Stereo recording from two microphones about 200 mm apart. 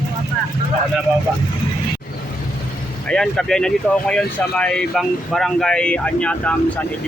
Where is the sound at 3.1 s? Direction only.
5° left (ahead or behind).